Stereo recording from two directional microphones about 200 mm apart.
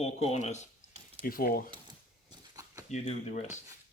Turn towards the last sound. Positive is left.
turn(degrees=35)  # may be behind; listen again after turning